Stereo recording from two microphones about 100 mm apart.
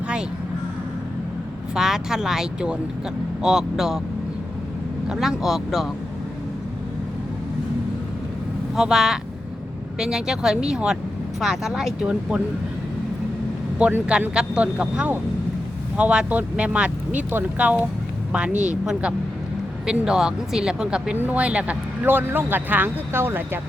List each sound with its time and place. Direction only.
1.7 s speech: 5° right (ahead or behind)
5.0 s speech: centre (ahead or behind)
8.7 s speech: 5° right (ahead or behind)
13.7 s speech: 10° right (ahead or behind)